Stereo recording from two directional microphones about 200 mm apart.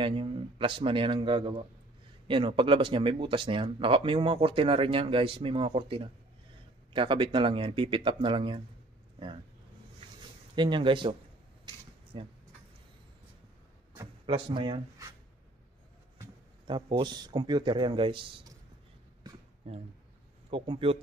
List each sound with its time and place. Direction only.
0.0 s speech: 25° right (ahead or behind)
10.5 s speech: 25° right (ahead or behind)
11.6 s mechanisms: 25° right (ahead or behind)
13.9 s speech: 25° right (ahead or behind)
16.2 s speech: 20° right (ahead or behind)
19.6 s speech: 30° right (ahead or behind)